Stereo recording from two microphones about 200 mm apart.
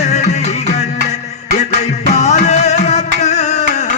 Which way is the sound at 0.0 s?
35° left (ahead or behind).